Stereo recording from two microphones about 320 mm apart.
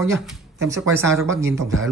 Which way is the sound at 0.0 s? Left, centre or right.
Centre.